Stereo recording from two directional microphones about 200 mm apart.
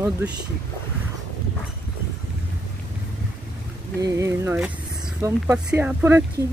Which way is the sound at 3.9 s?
15° right (ahead or behind).